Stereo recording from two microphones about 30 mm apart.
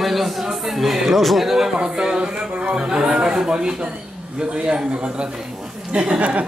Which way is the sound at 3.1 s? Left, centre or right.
Right.